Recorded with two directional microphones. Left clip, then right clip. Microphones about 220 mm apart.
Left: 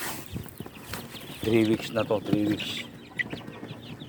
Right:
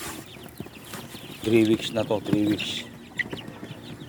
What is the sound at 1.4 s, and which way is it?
Speech, centre (ahead or behind).